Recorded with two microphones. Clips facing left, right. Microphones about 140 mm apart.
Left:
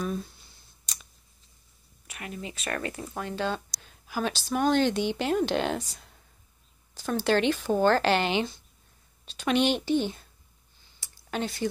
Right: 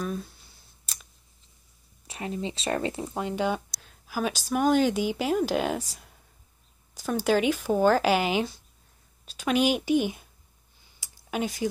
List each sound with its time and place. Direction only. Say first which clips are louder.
0.0 s speech: even; centre (ahead or behind)
0.9 s scissors: left 1 dB; 5° right (ahead or behind)
2.0 s speech: right 6 dB; 30° right (ahead or behind)
3.7 s speech: right 1 dB; centre (ahead or behind)
11.0 s a sound: right 2 dB; 10° right (ahead or behind)